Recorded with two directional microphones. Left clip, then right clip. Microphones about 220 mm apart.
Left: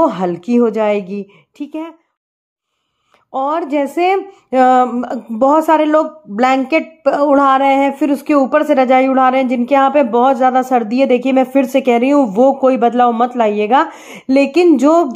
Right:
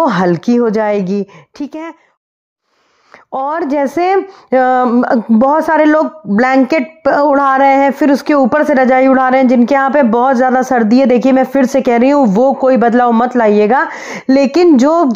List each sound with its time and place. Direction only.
0.0 s speech: 30° right (ahead or behind)
3.3 s speech: 30° right (ahead or behind)